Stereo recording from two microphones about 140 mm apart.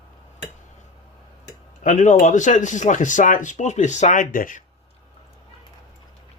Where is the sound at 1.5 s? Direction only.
60° left (ahead or behind); by 4.6 s 80° left.